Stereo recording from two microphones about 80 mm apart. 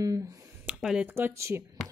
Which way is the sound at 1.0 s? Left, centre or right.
Right.